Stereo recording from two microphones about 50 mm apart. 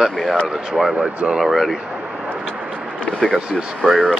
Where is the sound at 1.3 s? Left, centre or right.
Centre.